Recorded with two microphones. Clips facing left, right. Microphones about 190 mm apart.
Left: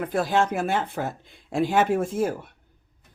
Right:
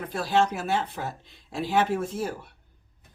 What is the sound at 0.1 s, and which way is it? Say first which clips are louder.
Speech: even; 50° left (ahead or behind).